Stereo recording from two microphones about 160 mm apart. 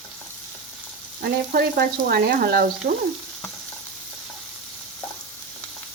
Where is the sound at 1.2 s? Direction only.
80° right.